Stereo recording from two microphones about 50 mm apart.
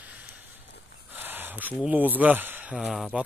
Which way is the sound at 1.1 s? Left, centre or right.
Right.